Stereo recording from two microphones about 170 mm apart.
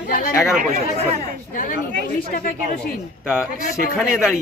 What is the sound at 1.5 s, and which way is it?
Speech, 55° left (ahead or behind).